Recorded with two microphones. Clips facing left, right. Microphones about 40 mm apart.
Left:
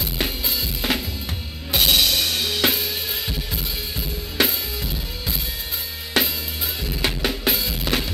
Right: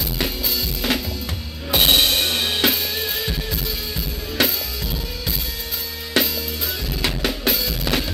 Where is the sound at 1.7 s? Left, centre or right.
Right.